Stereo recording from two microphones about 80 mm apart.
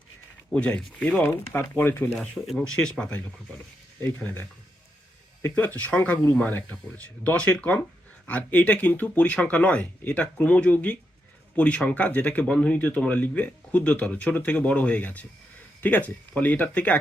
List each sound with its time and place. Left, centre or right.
0.5 s speech: centre
1.7 s speech: left
2.1 s speech: centre
5.4 s speech: left